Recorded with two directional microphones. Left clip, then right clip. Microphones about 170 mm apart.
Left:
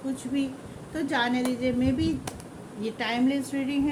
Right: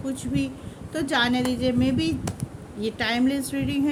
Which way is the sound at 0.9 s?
60° right (ahead or behind).